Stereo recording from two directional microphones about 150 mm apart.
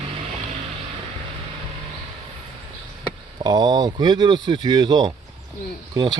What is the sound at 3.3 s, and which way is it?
Speech, 30° right (ahead or behind).